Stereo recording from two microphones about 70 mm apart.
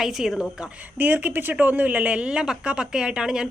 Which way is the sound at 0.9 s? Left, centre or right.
Right.